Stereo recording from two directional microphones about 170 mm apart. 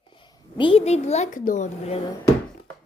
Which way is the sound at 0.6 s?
30° left (ahead or behind).